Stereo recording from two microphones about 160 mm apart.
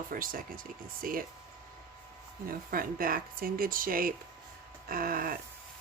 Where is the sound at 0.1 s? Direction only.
60° right (ahead or behind).